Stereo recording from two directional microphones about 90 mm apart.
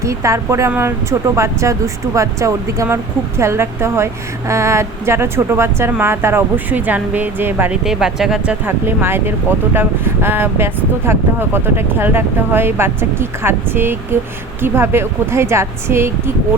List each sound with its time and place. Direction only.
0.0 s speech: 35° right (ahead or behind)
7.7 s speech: 5° right (ahead or behind)
8.6 s speech: 25° right (ahead or behind)